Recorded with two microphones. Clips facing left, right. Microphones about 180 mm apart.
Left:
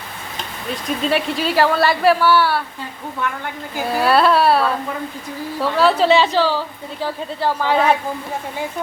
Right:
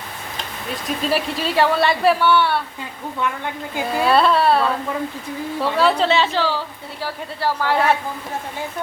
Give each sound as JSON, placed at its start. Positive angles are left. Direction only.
{"t": 0.9, "sound": "a woman's voice", "side_deg": 0}
{"t": 4.0, "sound": "a woman's voice", "side_deg": 5}
{"t": 6.1, "sound": "a woman's voice", "side_deg": 15}